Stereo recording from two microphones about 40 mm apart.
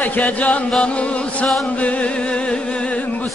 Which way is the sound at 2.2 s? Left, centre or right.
Left.